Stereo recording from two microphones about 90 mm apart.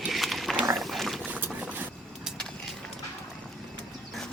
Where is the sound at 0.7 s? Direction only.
Centre (ahead or behind).